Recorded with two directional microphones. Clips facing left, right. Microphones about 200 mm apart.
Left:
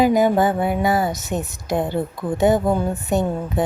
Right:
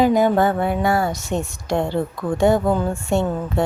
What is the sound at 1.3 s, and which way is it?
Speech, 5° left (ahead or behind).